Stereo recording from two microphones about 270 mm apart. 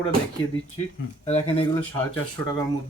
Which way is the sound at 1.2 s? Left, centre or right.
Left.